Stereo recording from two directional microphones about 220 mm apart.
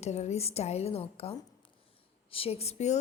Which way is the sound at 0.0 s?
30° left (ahead or behind).